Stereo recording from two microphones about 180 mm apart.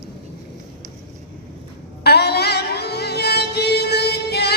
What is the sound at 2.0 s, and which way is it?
Music, 65° left (ahead or behind).